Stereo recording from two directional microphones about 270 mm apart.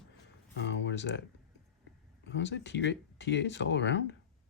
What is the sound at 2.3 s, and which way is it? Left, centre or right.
Speech, left.